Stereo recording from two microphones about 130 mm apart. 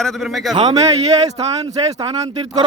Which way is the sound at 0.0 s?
Centre (ahead or behind).